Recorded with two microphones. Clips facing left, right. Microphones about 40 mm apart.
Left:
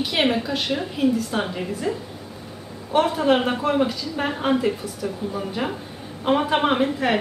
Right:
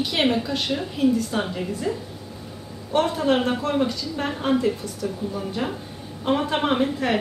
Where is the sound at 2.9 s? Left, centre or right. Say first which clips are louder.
Left 2 dB; centre.